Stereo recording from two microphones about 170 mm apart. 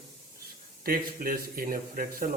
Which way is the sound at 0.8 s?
60° right (ahead or behind).